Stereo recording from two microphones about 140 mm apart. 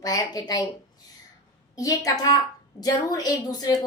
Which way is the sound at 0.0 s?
25° left (ahead or behind).